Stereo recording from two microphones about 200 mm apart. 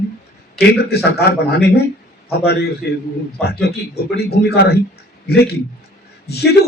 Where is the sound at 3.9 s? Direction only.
55° left (ahead or behind).